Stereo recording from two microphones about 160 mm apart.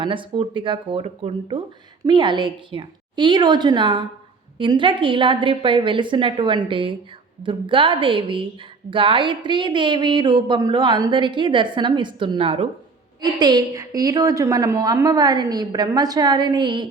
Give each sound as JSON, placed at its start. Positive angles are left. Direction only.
{"t": 0.0, "sound": "a woman's voice", "side_deg": -30}
{"t": 13.2, "sound": "speech", "side_deg": -25}